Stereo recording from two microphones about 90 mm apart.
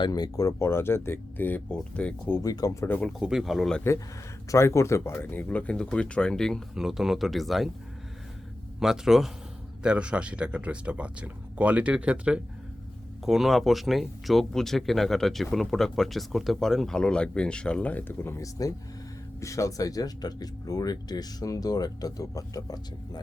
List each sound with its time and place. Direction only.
0.0 s speech: 45° left (ahead or behind)
0.6 s speech: 30° left (ahead or behind)
2.4 s speech: 40° left (ahead or behind)
3.2 s speech: 5° right (ahead or behind)
4.5 s speech: 30° left (ahead or behind); by 6.6 s 5° left (ahead or behind)
6.7 s speech: 5° right (ahead or behind)
8.8 s speech: 5° right (ahead or behind); by 23.2 s 45° left (ahead or behind)